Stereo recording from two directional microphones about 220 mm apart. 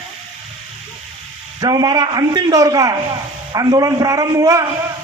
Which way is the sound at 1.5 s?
15° right (ahead or behind).